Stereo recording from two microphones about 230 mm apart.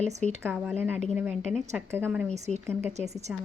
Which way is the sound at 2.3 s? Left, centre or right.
Right.